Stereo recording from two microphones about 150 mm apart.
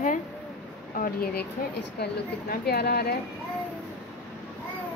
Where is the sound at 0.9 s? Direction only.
75° left (ahead or behind).